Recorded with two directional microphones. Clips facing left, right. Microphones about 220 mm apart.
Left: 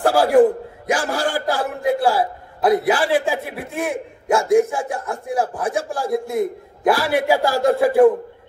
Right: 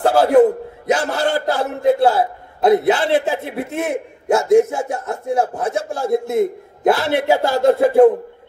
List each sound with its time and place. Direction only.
0.0 s a man's voice: 20° right (ahead or behind)